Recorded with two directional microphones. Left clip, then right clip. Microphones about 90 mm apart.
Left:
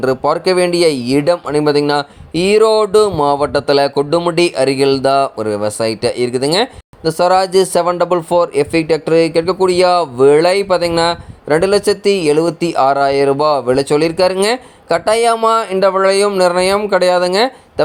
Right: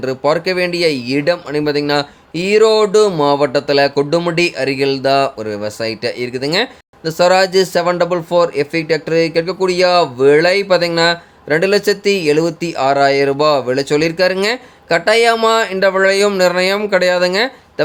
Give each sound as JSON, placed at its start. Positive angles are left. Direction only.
{"t": 0.0, "sound": "speech", "side_deg": 40}